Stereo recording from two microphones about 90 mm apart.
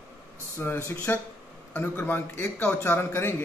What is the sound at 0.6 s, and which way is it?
A man's voice, 30° left (ahead or behind).